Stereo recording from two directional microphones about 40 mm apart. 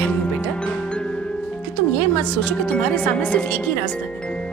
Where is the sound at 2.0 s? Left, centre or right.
Left.